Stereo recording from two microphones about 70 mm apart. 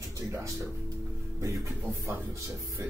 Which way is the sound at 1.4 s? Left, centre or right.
Right.